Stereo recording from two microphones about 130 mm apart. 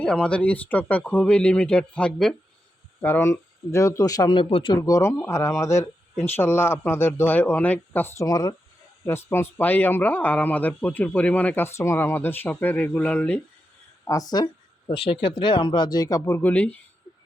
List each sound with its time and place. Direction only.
0.0 s speech: 10° left (ahead or behind)
3.0 s speech: 20° left (ahead or behind); by 4.8 s 40° left (ahead or behind)
4.8 s speech: 25° left (ahead or behind)
14.1 s speech: 30° left (ahead or behind)
14.8 s speech: 45° left (ahead or behind); by 16.4 s 25° left (ahead or behind)
16.4 s speech: 15° left (ahead or behind)